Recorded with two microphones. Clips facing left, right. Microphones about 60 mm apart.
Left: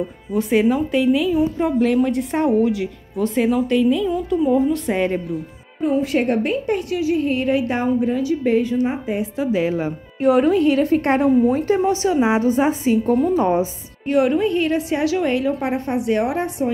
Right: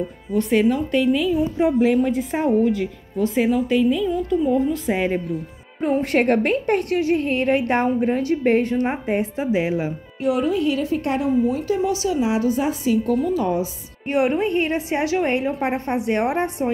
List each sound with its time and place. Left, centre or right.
0.3 s a woman's voice: centre
5.8 s a woman's voice: right
9.4 s speech: centre
10.2 s a woman's voice: left
14.0 s a woman's voice: right